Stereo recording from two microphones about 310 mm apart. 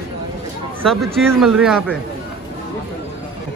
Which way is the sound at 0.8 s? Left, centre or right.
Centre.